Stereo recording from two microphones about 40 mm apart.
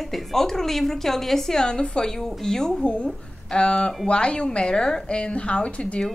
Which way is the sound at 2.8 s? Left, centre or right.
Left.